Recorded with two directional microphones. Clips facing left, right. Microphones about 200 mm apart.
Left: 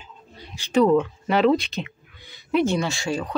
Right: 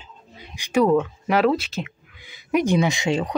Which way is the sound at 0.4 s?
10° right (ahead or behind).